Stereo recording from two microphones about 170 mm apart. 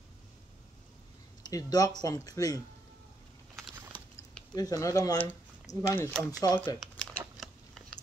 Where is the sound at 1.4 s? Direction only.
20° left (ahead or behind).